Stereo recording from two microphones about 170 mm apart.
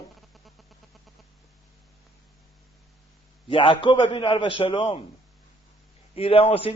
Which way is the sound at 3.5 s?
30° left (ahead or behind).